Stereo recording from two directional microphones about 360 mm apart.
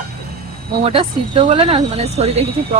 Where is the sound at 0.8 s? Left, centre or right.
Centre.